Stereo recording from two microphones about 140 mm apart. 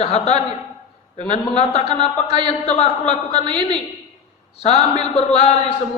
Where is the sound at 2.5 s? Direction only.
50° left (ahead or behind).